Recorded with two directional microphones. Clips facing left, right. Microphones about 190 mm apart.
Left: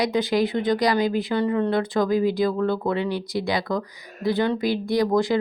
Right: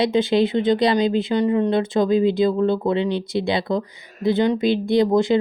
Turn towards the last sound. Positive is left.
turn(degrees=-25)  # may be behind; listen again after turning